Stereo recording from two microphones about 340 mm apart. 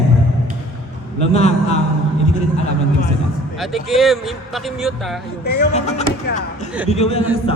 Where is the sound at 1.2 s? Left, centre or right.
Centre.